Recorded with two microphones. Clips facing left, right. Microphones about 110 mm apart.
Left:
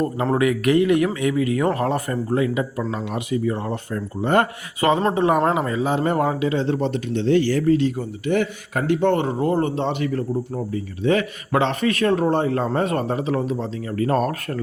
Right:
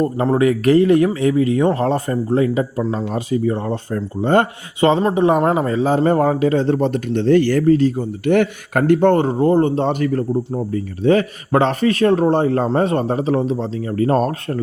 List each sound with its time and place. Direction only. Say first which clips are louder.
0.3 s speech: right 4 dB; 35° right (ahead or behind); by 7.6 s 50° right (ahead or behind)
7.7 s speech: right 4 dB; 40° right (ahead or behind)
8.2 s speech: right 6 dB; 60° right (ahead or behind); by 14.6 s 30° right (ahead or behind)